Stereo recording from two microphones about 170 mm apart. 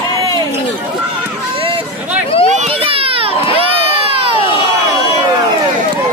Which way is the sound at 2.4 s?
40° right (ahead or behind).